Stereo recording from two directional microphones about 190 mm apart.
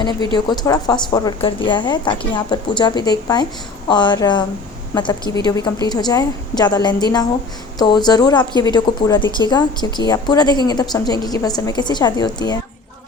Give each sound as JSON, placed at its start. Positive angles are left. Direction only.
{"t": 0.0, "sound": "a woman's voice", "side_deg": 20}